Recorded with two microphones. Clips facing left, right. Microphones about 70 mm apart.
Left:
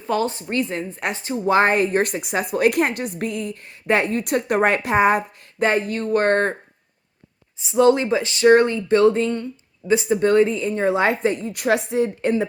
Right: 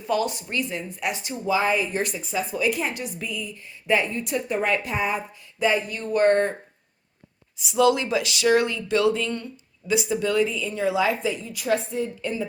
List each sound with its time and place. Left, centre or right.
0.1 s speech: left
1.5 s a woman's voice: left
2.2 s a woman's voice: left
5.5 s a woman's voice: left
7.6 s speech: left
10.2 s a woman's voice: left